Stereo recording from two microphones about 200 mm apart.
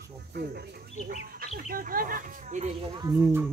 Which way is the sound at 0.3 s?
55° right (ahead or behind).